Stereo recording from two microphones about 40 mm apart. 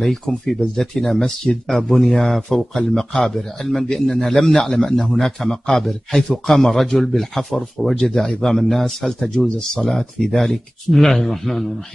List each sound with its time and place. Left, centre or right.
0.0 s speech: centre
8.0 s speech: centre